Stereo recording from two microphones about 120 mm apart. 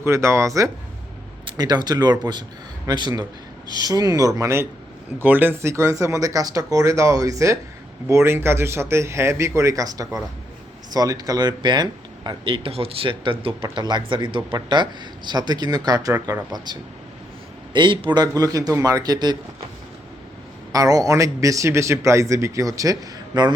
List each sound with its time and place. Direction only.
0.0 s a man's voice: 20° right (ahead or behind)
17.7 s speech: 45° right (ahead or behind)
20.7 s a man's voice: 30° right (ahead or behind)